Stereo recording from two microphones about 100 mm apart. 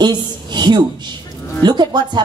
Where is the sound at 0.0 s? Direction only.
45° right (ahead or behind).